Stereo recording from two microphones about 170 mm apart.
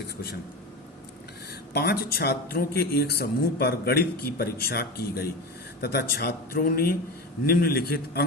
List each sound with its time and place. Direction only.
1.7 s a man's voice: 70° left (ahead or behind)